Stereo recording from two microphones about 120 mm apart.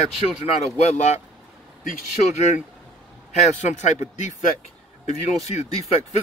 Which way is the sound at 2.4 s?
90° left.